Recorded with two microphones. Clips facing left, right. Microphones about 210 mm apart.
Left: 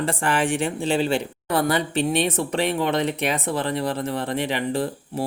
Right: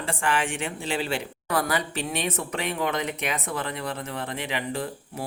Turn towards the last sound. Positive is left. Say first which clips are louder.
# left 6 dB
turn(degrees=35)  # may be behind; listen again after turning